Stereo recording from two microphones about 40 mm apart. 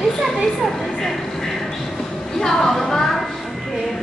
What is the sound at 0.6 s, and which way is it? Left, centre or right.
Speech, centre.